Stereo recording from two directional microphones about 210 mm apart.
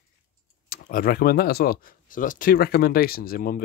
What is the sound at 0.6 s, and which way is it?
Speech, 45° left (ahead or behind).